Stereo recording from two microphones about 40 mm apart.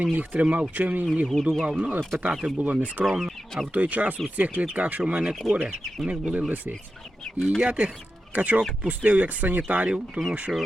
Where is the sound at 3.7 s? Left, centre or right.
Right.